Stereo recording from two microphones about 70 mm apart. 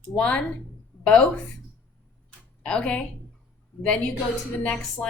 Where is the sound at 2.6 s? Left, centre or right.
Centre.